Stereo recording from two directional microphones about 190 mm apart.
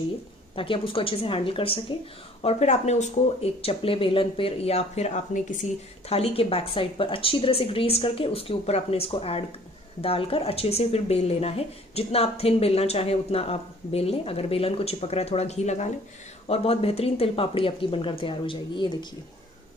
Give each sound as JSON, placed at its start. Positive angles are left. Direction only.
{"t": 0.6, "sound": "speech", "side_deg": 30}